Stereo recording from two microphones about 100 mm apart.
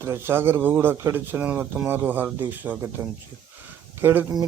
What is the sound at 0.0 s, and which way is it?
Speech, 25° right (ahead or behind).